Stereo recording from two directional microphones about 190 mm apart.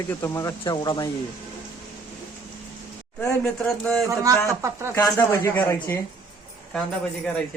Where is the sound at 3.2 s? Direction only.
5° left (ahead or behind).